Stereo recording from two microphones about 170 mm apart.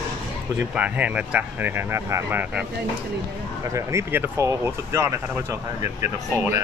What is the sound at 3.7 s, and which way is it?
Speech, 15° right (ahead or behind).